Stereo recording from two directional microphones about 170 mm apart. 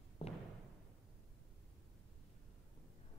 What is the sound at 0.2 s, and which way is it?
Thump, 35° left (ahead or behind).